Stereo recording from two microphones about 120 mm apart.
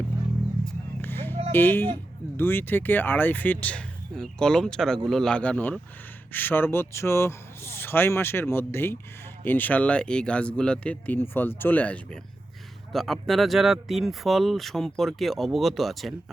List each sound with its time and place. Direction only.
1.0 s a sound: 20° left (ahead or behind)
1.5 s speech: 15° left (ahead or behind)
12.9 s speech: centre (ahead or behind)